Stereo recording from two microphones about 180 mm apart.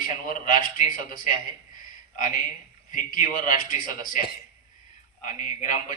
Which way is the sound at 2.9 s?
50° left (ahead or behind).